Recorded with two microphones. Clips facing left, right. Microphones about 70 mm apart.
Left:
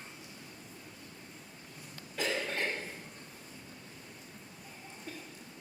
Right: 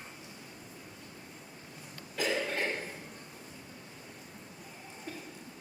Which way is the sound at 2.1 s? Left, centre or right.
Centre.